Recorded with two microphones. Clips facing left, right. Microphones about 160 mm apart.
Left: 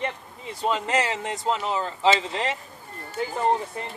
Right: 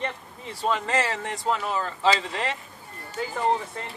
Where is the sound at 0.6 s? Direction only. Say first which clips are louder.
Left 1 dB; 20° left (ahead or behind).